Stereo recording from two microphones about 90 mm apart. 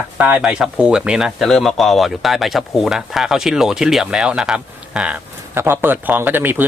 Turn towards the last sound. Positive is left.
turn(degrees=-20)  # may be behind; listen again after turning